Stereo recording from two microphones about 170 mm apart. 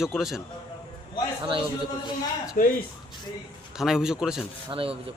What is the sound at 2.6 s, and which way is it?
Speech, 55° left (ahead or behind).